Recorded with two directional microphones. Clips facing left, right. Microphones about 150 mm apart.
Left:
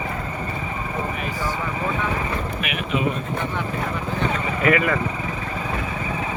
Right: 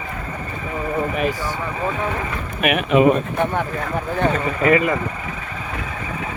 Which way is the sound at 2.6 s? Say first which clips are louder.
Right 12 dB; 55° right (ahead or behind).